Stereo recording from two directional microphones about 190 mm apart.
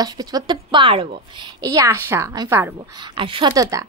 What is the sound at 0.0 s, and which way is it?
A woman's voice, 20° right (ahead or behind).